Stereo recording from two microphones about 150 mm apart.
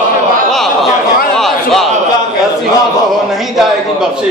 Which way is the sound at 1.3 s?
Centre (ahead or behind).